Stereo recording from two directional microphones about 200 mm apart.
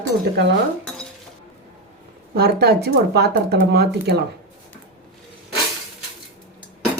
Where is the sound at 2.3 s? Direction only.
50° right (ahead or behind).